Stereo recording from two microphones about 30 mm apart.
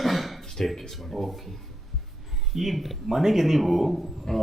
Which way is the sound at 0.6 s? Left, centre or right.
Centre.